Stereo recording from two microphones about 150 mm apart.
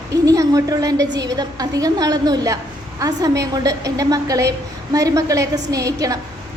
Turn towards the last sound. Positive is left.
turn(degrees=-25)  # may be behind; listen again after turning